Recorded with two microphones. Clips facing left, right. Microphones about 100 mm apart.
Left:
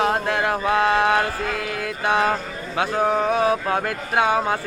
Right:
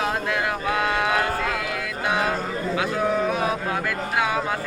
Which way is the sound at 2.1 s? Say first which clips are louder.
Left 4 dB; 35° left (ahead or behind).